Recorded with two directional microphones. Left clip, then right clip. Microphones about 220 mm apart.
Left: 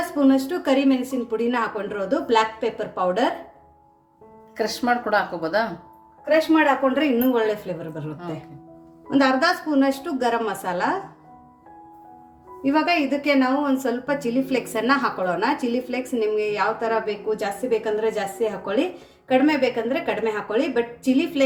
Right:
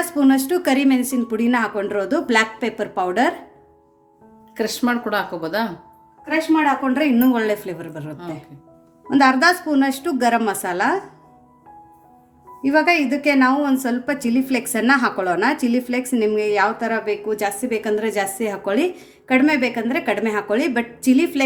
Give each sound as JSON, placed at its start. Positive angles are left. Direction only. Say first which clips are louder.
{"t": 0.2, "sound": "a woman's voice", "louder": "right 3 dB", "side_deg": -45}
{"t": 4.5, "sound": "speech", "louder": "even", "side_deg": -20}
{"t": 7.3, "sound": "a woman's voice", "louder": "right 2 dB", "side_deg": -50}
{"t": 9.0, "sound": "a woman's voice", "louder": "right 4 dB", "side_deg": -45}
{"t": 12.6, "sound": "a woman's voice", "louder": "right 4 dB", "side_deg": -45}